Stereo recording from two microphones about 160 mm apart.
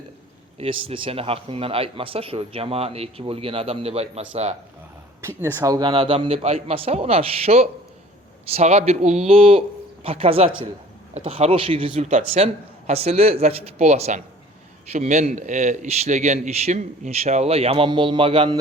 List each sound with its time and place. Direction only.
0.6 s speech: 35° right (ahead or behind)
5.4 s a man's voice: 15° right (ahead or behind); by 18.5 s 35° right (ahead or behind)